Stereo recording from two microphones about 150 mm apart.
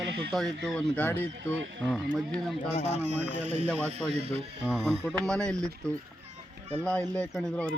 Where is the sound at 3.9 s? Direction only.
45° right (ahead or behind).